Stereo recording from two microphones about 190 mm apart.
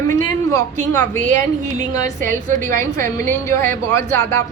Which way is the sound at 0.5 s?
15° left (ahead or behind).